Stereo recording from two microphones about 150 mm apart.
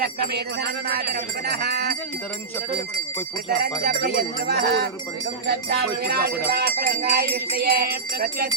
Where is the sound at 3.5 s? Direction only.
90° right.